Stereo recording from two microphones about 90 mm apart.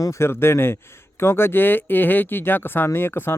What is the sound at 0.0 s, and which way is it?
Speech, 30° left (ahead or behind).